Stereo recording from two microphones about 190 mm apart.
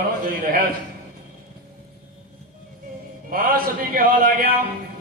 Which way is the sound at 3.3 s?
50° right (ahead or behind).